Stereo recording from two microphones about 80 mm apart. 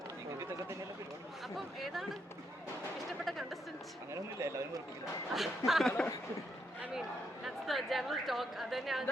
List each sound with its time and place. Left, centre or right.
1.5 s speech: centre
3.1 s music: centre
4.1 s speech: right
5.3 s speech: centre
7.4 s a woman's voice: centre